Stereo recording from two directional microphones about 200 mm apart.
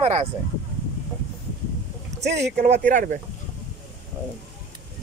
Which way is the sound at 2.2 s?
60° right (ahead or behind).